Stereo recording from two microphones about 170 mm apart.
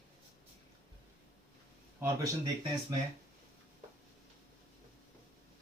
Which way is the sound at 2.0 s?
25° right (ahead or behind).